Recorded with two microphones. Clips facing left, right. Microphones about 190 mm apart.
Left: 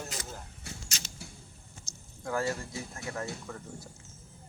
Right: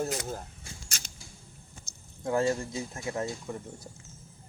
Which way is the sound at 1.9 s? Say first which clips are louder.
Left 3 dB; 55° right (ahead or behind).